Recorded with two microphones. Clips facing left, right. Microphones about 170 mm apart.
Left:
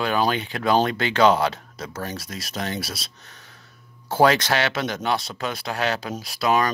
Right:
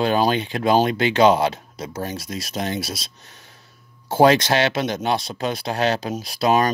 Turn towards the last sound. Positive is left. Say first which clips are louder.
# right 3 dB
turn(degrees=-25)  # may be behind; listen again after turning